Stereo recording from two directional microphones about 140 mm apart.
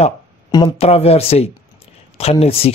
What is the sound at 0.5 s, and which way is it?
Speech, 45° left (ahead or behind).